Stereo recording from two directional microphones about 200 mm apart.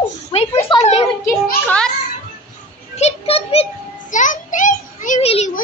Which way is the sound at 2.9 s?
30° left (ahead or behind).